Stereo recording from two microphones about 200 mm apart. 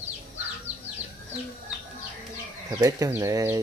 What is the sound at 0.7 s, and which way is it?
Bird, 35° right (ahead or behind).